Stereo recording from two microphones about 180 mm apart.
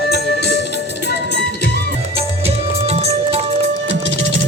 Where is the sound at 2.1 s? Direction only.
35° right (ahead or behind).